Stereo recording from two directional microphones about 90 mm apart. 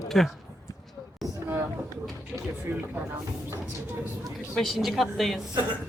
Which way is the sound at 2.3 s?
Centre (ahead or behind).